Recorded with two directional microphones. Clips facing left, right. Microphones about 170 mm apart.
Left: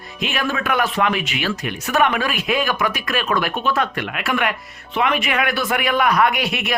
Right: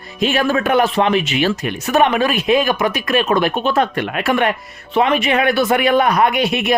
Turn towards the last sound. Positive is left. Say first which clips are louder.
# right 6 dB
turn(degrees=-20)  # may be behind; listen again after turning